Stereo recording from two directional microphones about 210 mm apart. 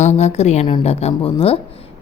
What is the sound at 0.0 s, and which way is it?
A woman's voice, 30° left (ahead or behind).